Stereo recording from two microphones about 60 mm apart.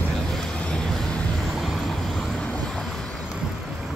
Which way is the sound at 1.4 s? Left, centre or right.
Centre.